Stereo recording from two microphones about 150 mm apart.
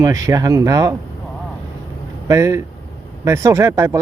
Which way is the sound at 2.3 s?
20° right (ahead or behind).